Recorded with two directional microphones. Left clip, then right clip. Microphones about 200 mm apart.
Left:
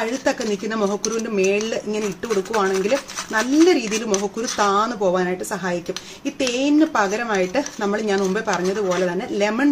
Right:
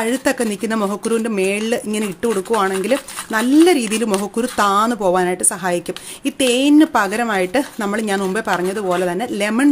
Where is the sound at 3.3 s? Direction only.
45° right (ahead or behind).